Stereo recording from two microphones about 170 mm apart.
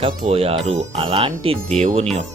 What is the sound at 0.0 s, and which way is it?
Speech, 35° right (ahead or behind).